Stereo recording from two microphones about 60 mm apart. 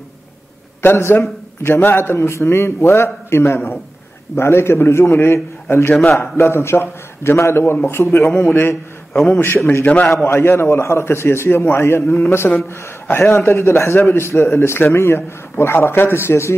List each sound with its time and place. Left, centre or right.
0.8 s a man's voice: left
9.9 s a man's voice: centre
10.2 s a man's voice: left